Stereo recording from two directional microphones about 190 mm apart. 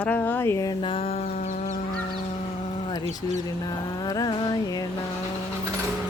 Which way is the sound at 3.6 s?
20° left (ahead or behind).